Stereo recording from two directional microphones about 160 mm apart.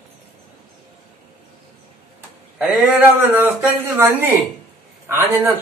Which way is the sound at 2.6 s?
5° right (ahead or behind).